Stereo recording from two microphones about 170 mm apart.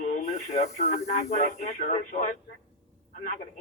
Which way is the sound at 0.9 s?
55° left (ahead or behind).